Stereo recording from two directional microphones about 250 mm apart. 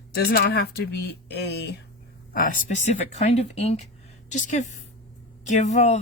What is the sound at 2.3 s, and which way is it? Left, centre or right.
A woman's voice, left.